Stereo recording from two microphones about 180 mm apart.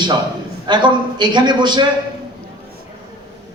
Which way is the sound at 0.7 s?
25° right (ahead or behind).